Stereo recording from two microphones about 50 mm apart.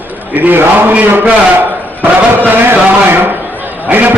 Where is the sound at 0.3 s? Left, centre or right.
Right.